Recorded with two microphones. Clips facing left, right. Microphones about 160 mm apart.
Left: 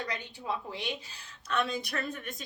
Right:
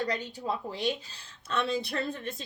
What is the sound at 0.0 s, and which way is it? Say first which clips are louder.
A woman's voice: right 6 dB; 35° right (ahead or behind).